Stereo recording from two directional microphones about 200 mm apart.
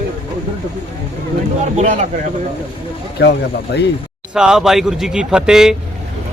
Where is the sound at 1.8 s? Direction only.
35° right (ahead or behind).